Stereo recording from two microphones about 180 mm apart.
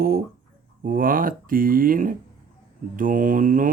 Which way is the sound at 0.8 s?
50° right (ahead or behind).